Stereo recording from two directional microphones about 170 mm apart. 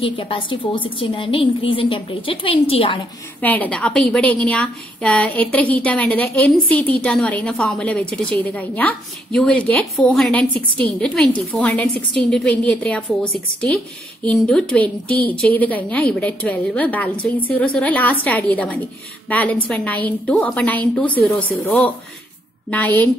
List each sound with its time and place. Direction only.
0.0 s a woman's voice: 30° left (ahead or behind)
3.3 s a woman's voice: 10° left (ahead or behind)
15.0 s a woman's voice: 60° left (ahead or behind)
15.4 s a woman's voice: 10° left (ahead or behind)